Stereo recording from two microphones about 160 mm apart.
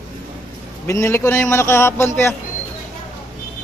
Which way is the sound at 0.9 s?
15° left (ahead or behind).